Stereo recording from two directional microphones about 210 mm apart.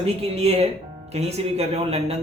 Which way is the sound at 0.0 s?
30° right (ahead or behind).